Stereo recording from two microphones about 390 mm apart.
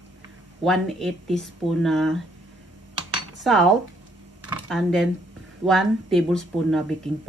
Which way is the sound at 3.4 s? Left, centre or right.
Centre.